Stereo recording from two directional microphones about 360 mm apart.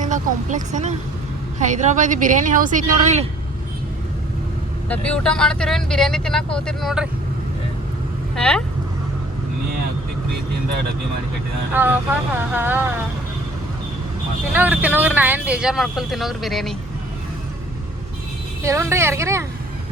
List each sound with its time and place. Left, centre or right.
0.0 s speech: right
4.9 s speech: centre
8.4 s speech: centre
11.7 s speech: centre
14.5 s speech: centre
18.6 s a woman's voice: centre